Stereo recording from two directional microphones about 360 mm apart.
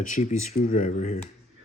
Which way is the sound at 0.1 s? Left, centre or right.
Centre.